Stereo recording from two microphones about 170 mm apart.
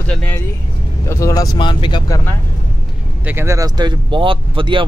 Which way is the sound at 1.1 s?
20° left (ahead or behind).